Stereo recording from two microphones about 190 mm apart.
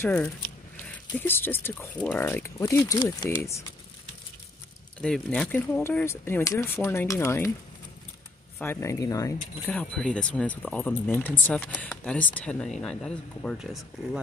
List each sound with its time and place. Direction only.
0.0 s speech: 5° left (ahead or behind)
5.0 s speech: 5° left (ahead or behind)
8.5 s speech: 10° left (ahead or behind)
9.7 s speech: 5° left (ahead or behind)